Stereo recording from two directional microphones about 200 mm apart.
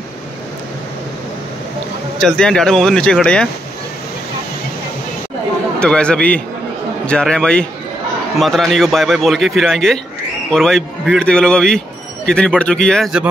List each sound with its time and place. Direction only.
2.1 s a man's voice: 5° left (ahead or behind)
5.8 s a man's voice: 5° left (ahead or behind)